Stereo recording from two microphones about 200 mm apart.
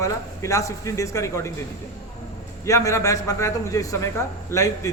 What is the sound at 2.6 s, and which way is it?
A man's voice, 15° left (ahead or behind).